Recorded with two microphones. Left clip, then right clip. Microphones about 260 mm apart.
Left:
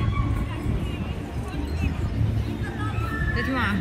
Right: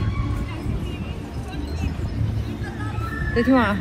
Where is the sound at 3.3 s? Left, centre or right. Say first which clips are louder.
Right 9 dB; centre.